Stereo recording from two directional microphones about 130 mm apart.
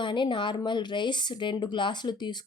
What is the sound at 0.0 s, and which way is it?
Speech, 40° left (ahead or behind).